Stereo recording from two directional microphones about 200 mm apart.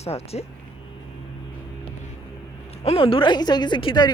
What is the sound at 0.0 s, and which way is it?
Speech, 30° left (ahead or behind).